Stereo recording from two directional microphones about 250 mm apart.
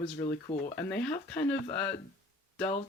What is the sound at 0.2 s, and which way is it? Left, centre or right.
Speech, centre.